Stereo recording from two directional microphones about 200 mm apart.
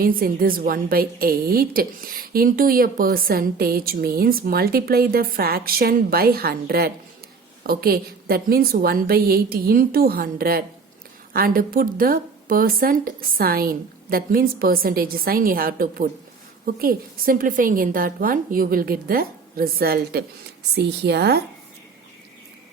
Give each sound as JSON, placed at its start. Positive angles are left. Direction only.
{"t": 0.0, "sound": "a woman's voice", "side_deg": -45}